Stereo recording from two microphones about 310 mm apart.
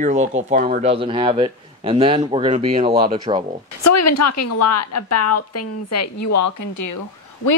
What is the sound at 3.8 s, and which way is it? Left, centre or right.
A woman's voice, left.